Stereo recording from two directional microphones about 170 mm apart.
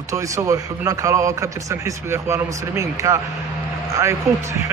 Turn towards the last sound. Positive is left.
turn(degrees=-15)  # may be behind; listen again after turning